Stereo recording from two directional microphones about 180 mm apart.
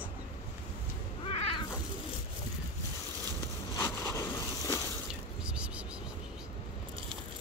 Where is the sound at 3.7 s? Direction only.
15° left (ahead or behind).